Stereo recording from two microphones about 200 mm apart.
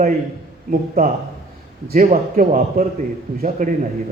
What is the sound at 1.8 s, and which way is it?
A man's voice, 45° right (ahead or behind).